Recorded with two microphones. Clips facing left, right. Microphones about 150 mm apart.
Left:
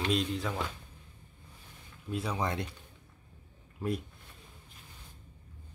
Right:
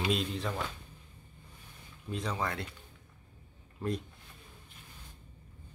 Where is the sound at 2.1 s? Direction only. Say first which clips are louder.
Left 2 dB; 10° left (ahead or behind).